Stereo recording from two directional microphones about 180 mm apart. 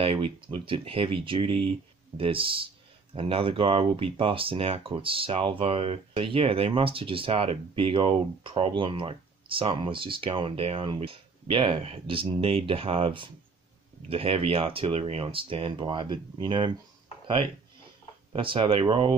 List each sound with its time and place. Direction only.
0.0 s speech: 30° right (ahead or behind)
18.3 s speech: 30° right (ahead or behind)